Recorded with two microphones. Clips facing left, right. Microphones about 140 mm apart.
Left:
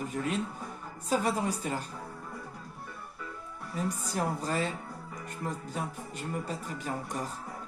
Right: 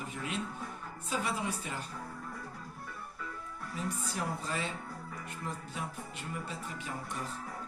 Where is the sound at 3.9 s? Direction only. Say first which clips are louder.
Left 4 dB; 40° left (ahead or behind).